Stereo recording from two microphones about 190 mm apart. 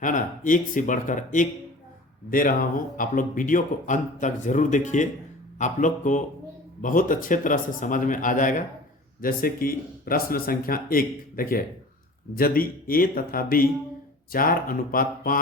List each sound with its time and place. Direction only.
0.0 s speech: 45° left (ahead or behind)